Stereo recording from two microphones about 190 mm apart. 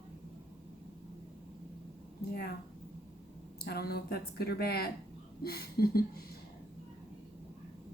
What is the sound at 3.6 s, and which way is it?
Speech, 55° left (ahead or behind).